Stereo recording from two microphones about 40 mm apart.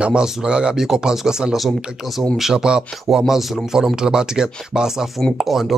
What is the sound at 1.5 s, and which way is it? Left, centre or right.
Speech, centre.